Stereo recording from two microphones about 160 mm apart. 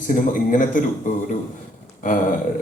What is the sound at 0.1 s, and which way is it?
A man's voice, 55° left (ahead or behind).